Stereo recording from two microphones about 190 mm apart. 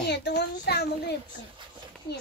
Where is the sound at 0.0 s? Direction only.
60° left (ahead or behind).